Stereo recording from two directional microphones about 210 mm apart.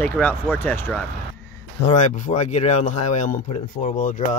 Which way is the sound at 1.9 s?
35° left (ahead or behind).